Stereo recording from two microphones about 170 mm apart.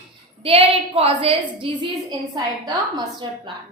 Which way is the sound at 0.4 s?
35° right (ahead or behind).